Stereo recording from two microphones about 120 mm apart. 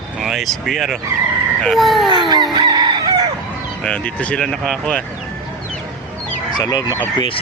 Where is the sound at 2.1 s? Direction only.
40° right (ahead or behind).